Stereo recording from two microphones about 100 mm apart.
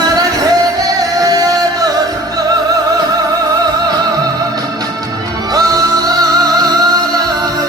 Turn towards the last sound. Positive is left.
turn(degrees=-40)  # may be behind; listen again after turning